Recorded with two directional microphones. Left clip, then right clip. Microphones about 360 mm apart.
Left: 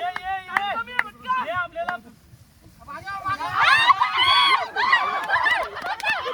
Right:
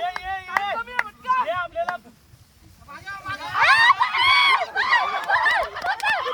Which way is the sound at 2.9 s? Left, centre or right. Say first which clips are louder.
Left 4 dB; centre.